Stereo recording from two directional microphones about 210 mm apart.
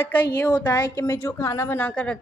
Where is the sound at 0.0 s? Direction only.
10° left (ahead or behind).